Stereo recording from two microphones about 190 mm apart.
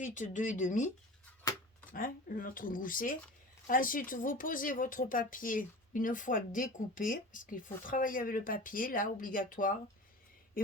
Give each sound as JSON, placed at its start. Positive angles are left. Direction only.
{"t": 0.0, "sound": "speech", "side_deg": 40}
{"t": 1.9, "sound": "speech", "side_deg": 45}